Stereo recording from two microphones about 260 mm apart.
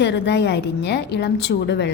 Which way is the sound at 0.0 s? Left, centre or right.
Left.